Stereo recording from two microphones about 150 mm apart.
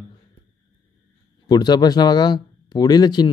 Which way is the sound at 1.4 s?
30° left (ahead or behind).